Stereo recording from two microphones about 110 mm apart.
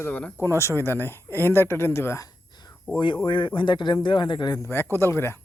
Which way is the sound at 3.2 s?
50° left (ahead or behind).